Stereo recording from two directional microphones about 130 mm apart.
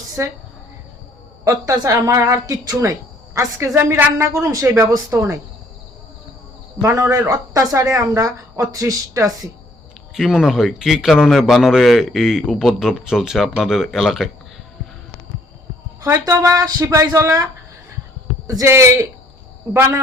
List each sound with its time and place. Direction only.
0.2 s speech: 20° right (ahead or behind)
1.5 s speech: 25° right (ahead or behind)
6.8 s speech: 25° right (ahead or behind)
10.2 s a man's voice: centre (ahead or behind)
16.0 s speech: 25° right (ahead or behind)
18.4 s speech: 25° right (ahead or behind)